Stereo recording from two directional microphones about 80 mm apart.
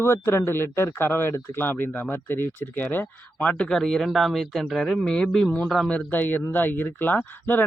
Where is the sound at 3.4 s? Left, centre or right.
Centre.